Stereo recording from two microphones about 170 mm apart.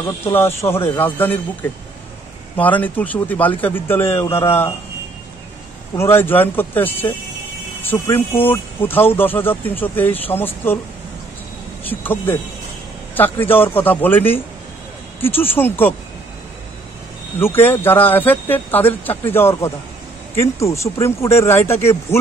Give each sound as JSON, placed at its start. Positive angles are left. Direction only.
{"t": 0.2, "sound": "speech", "side_deg": 15}
{"t": 5.9, "sound": "speech", "side_deg": 15}
{"t": 11.8, "sound": "speech", "side_deg": 10}
{"t": 17.4, "sound": "speech", "side_deg": 10}